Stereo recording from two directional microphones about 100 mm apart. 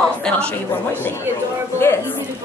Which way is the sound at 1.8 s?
25° left (ahead or behind).